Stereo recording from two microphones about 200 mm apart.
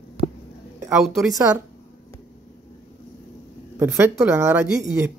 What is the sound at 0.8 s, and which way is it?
Speech, centre (ahead or behind).